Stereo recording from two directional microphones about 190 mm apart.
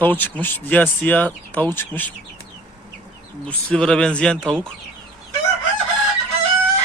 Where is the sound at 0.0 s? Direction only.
10° left (ahead or behind).